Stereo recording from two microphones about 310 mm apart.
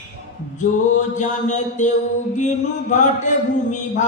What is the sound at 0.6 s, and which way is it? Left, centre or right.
Mantra, left.